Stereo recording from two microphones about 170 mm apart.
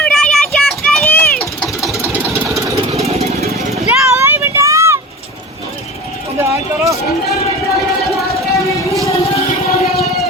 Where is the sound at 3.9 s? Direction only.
15° right (ahead or behind).